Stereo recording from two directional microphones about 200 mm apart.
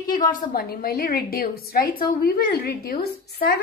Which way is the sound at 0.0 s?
45° left (ahead or behind).